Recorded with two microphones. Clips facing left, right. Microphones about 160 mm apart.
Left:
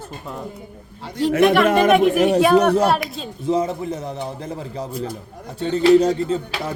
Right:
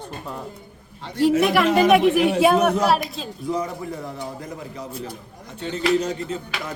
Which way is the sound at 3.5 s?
20° left (ahead or behind).